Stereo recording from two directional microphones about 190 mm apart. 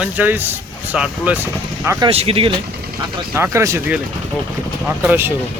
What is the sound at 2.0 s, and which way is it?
Speech, 30° right (ahead or behind).